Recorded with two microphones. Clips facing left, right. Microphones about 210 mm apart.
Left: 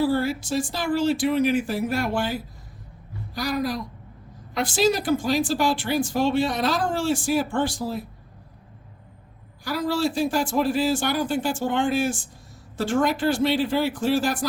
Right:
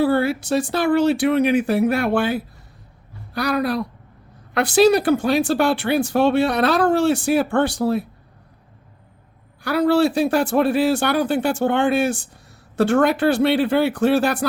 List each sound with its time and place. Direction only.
0.0 s speech: 60° right (ahead or behind)
9.6 s speech: 65° right (ahead or behind)